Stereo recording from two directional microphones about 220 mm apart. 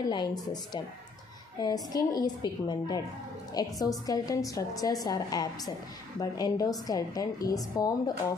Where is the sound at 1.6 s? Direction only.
15° left (ahead or behind).